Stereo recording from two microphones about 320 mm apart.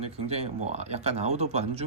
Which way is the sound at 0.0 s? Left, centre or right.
Centre.